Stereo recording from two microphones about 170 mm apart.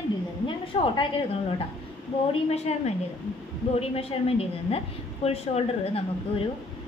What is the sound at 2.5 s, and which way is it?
A woman's voice, 40° left (ahead or behind).